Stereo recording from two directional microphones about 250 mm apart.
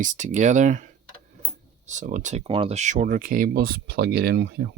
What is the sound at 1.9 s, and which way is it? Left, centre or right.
Speech, right.